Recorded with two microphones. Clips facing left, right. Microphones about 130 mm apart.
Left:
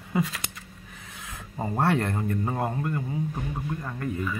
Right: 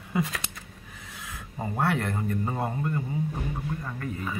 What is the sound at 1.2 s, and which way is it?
Speech, 25° left (ahead or behind).